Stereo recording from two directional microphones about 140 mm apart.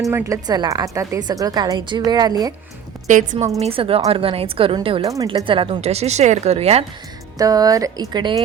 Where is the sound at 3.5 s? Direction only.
45° right (ahead or behind).